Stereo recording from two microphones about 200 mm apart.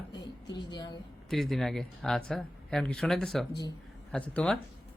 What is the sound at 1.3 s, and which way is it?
Speech, centre (ahead or behind).